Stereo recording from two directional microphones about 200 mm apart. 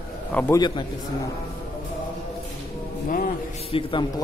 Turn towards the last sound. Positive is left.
turn(degrees=25)  # may be behind; listen again after turning